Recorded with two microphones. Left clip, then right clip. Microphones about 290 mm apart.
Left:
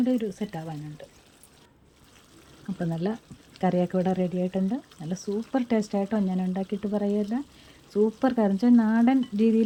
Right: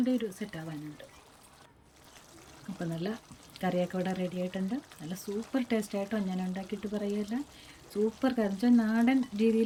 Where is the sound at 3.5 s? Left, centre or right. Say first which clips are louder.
Left 6 dB; centre.